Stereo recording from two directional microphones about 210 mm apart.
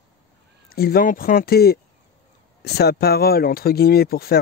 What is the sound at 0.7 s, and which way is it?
Speech, 45° left (ahead or behind).